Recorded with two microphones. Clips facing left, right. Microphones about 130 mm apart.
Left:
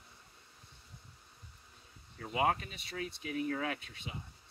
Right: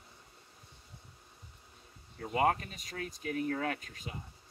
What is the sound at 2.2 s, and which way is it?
Speech, 40° right (ahead or behind).